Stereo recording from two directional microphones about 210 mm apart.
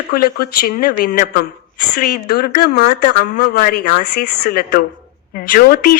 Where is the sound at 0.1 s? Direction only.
45° left (ahead or behind).